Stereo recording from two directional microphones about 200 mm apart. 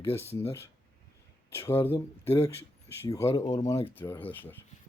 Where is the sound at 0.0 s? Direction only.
10° left (ahead or behind).